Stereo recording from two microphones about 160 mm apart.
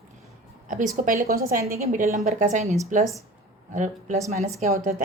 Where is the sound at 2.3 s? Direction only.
50° right (ahead or behind).